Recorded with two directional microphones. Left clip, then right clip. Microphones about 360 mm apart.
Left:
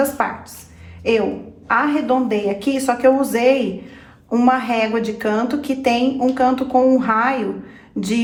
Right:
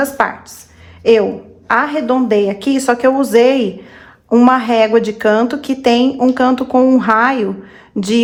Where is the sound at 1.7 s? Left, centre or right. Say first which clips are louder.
Right 3 dB; right.